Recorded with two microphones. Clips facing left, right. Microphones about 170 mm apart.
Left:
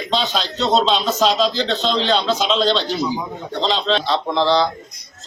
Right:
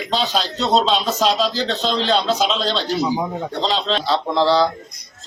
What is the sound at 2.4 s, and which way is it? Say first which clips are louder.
Speech: left 3 dB; 5° right (ahead or behind).